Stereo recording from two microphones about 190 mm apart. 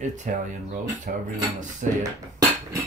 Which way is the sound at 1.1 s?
45° right (ahead or behind).